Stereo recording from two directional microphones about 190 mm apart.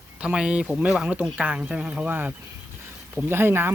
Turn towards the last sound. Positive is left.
turn(degrees=-10)  # may be behind; listen again after turning